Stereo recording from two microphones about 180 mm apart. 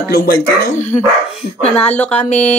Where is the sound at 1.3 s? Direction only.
5° left (ahead or behind).